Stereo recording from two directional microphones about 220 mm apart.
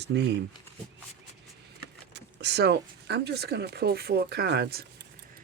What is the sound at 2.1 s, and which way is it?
Speech, 50° right (ahead or behind).